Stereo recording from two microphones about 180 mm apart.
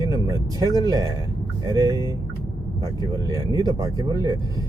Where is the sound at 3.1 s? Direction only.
20° right (ahead or behind).